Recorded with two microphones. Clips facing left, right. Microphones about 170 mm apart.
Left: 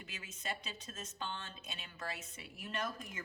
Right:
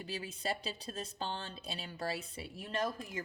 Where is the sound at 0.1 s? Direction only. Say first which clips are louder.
Right 7 dB; 35° right (ahead or behind).